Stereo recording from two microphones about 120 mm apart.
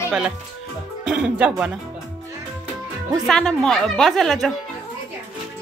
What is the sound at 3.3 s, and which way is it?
A woman's voice, 5° left (ahead or behind).